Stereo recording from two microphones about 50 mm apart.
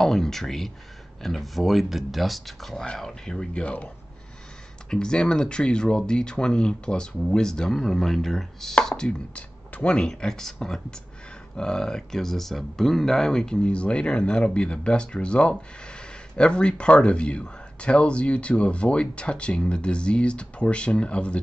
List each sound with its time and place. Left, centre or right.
0.0 s speech: centre
3.6 s speech: left
4.8 s speech: centre
9.3 s speech: left